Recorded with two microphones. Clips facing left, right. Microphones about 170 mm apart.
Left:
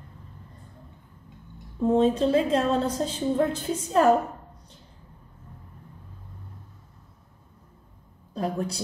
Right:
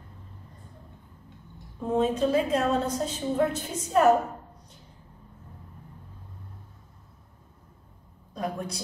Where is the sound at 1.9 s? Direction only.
35° left (ahead or behind).